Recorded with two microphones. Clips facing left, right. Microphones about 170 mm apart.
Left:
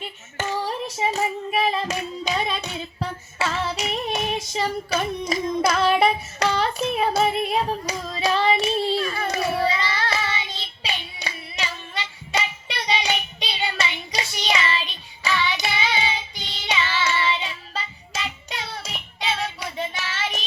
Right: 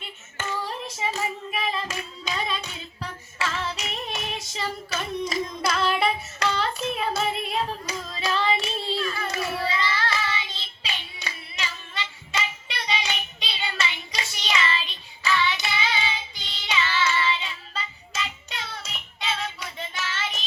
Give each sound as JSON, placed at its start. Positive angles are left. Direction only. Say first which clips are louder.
{"t": 0.6, "sound": "hands", "louder": "left 5 dB", "side_deg": 40}
{"t": 3.0, "sound": "female singing", "louder": "left 3 dB", "side_deg": 40}
{"t": 11.9, "sound": "child singing", "louder": "left 4 dB", "side_deg": 40}